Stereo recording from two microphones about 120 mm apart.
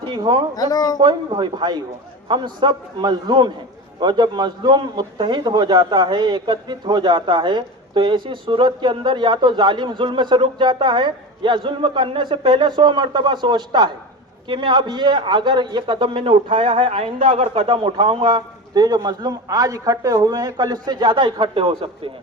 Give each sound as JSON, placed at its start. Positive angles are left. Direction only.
{"t": 0.0, "sound": "speech", "side_deg": -40}
{"t": 0.5, "sound": "speech", "side_deg": 30}
{"t": 1.0, "sound": "a man's voice", "side_deg": -40}